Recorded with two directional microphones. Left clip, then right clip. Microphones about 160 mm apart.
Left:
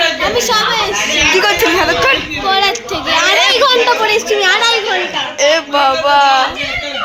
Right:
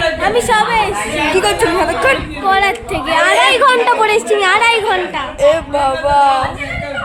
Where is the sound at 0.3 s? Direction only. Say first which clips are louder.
Right 3 dB; 50° right (ahead or behind).